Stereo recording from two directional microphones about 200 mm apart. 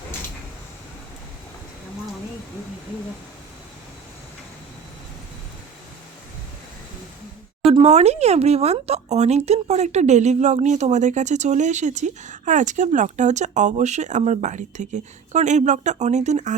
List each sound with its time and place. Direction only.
7.7 s speech: 30° right (ahead or behind)